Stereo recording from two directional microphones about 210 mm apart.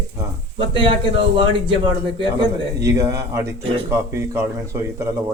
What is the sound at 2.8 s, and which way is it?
Speech, 15° right (ahead or behind).